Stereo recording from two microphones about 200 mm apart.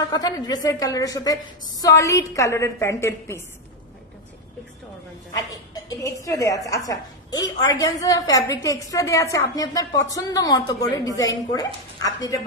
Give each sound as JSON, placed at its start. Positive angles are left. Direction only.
{"t": 0.1, "sound": "a woman's voice", "side_deg": 20}
{"t": 5.3, "sound": "a woman's voice", "side_deg": 20}